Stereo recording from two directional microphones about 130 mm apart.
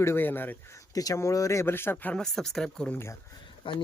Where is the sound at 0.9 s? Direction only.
25° left (ahead or behind); by 3.0 s 5° left (ahead or behind).